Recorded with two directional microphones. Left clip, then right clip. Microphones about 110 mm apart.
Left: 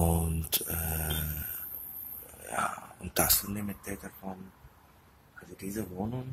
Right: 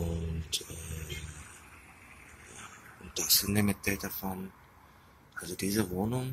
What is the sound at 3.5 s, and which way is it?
Speech, 20° right (ahead or behind).